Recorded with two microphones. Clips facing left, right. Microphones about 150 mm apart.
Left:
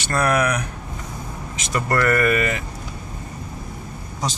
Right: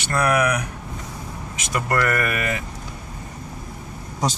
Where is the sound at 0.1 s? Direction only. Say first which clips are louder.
Even; 10° right (ahead or behind).